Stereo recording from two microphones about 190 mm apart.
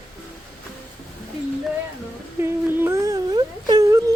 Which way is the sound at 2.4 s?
10° right (ahead or behind).